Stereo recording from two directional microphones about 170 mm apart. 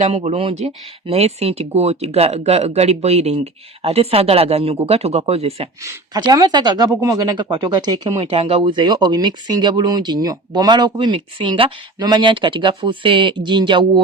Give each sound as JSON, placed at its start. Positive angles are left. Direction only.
{"t": 0.0, "sound": "speech", "side_deg": -35}
{"t": 5.8, "sound": "speech", "side_deg": -20}